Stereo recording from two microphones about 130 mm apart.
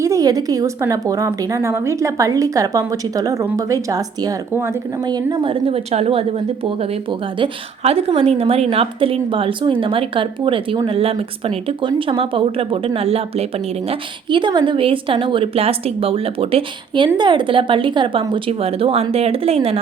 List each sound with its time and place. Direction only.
0.0 s a woman's voice: 25° right (ahead or behind); by 6.2 s 50° right (ahead or behind)
7.3 s a woman's voice: 45° right (ahead or behind)
14.3 s a woman's voice: 35° right (ahead or behind)